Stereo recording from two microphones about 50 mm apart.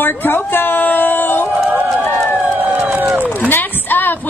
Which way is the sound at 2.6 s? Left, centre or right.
Right.